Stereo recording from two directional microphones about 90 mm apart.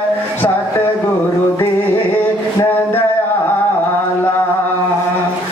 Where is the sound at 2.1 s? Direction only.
20° left (ahead or behind).